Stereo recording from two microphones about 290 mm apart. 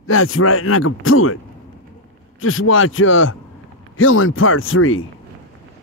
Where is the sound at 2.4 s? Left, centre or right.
Left.